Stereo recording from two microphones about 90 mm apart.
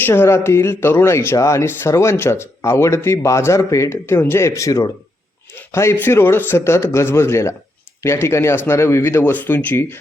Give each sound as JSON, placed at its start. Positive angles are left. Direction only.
{"t": 0.0, "sound": "speech", "side_deg": 25}